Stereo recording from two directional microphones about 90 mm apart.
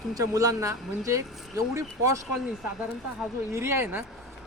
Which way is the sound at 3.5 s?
30° right (ahead or behind).